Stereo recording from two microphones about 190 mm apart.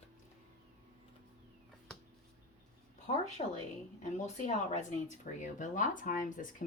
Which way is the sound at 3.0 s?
35° left (ahead or behind).